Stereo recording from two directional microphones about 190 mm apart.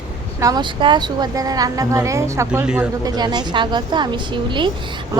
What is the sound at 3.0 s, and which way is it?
A woman's voice, 20° right (ahead or behind).